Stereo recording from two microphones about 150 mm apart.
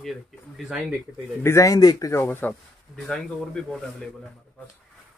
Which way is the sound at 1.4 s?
20° left (ahead or behind).